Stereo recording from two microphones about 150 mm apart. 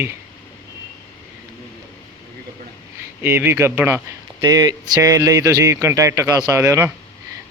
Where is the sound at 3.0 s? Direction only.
15° right (ahead or behind).